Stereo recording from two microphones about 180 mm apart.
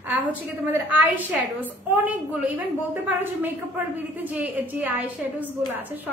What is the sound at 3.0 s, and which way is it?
A woman's voice, 10° right (ahead or behind).